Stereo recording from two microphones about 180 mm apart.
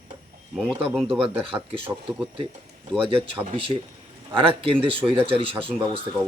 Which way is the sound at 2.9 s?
30° right (ahead or behind).